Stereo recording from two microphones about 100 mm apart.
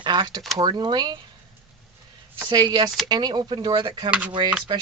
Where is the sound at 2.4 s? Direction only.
45° right (ahead or behind).